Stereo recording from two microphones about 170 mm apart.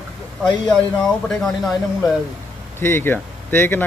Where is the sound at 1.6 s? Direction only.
Centre (ahead or behind).